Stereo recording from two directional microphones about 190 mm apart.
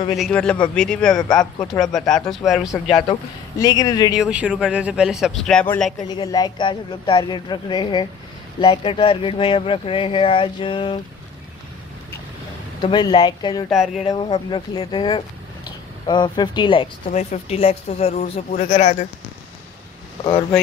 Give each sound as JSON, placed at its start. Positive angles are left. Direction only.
{"t": 0.1, "sound": "speech", "side_deg": 5}
{"t": 3.1, "sound": "speech", "side_deg": 20}
{"t": 4.1, "sound": "speech", "side_deg": -5}
{"t": 6.0, "sound": "speech", "side_deg": 20}
{"t": 12.8, "sound": "speech", "side_deg": 25}
{"t": 13.7, "sound": "speech", "side_deg": 0}
{"t": 14.0, "sound": "speech", "side_deg": 25}